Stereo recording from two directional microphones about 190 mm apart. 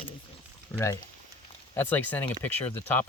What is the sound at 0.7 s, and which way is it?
Speech, 15° left (ahead or behind).